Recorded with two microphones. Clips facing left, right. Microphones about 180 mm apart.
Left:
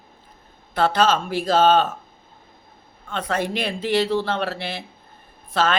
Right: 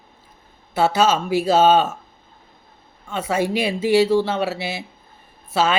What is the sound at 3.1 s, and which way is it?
Speech, 10° right (ahead or behind).